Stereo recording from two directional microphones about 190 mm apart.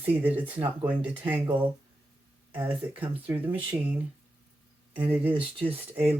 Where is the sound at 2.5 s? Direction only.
10° right (ahead or behind).